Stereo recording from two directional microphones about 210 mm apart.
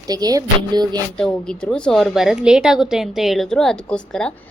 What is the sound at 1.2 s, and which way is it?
A woman's voice, 5° left (ahead or behind).